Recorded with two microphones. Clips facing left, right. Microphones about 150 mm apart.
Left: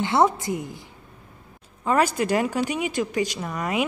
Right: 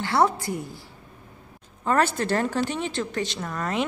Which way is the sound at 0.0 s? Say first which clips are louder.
Left 2 dB; 20° left (ahead or behind).